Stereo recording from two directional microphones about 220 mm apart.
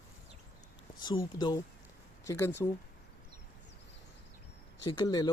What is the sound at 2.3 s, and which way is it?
Speech, 10° left (ahead or behind).